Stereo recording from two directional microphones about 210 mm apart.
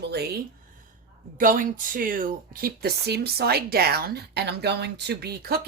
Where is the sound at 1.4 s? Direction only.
40° right (ahead or behind).